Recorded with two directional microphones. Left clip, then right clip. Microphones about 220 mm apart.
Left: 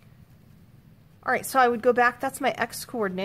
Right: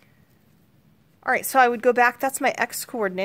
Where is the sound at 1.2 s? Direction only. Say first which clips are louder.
Right 3 dB; 25° right (ahead or behind).